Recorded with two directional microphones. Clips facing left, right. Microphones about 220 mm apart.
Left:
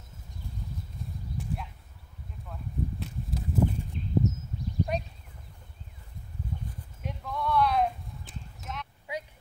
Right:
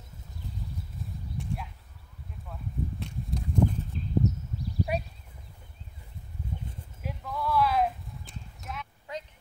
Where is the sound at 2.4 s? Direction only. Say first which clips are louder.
Left 1 dB; centre (ahead or behind).